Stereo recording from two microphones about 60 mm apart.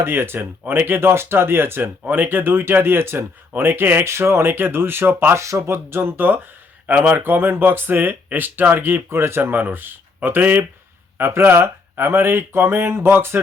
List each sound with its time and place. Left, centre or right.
0.0 s speech: right
5.4 s speech: right
9.0 s speech: right